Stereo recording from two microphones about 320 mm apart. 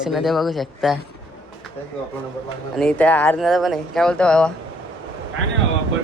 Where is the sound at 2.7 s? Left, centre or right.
Centre.